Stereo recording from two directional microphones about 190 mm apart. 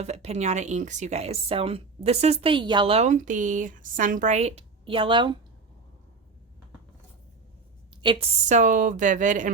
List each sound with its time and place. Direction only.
0.0 s speech: 35° right (ahead or behind)
8.0 s a woman's voice: 25° right (ahead or behind)
8.4 s speech: 40° right (ahead or behind)